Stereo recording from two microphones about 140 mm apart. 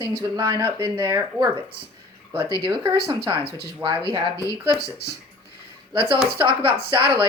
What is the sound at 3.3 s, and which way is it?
Speech, 40° right (ahead or behind).